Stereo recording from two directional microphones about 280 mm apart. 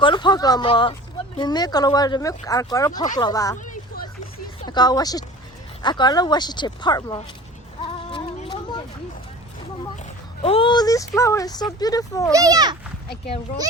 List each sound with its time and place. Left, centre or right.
0.0 s speech: centre
4.6 s speech: centre
8.1 s music: centre
10.4 s speech: centre
12.3 s a child's voice: centre
13.1 s a child's voice: left